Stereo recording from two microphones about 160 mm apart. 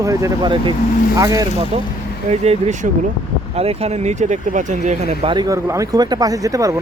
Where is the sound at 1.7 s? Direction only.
35° right (ahead or behind).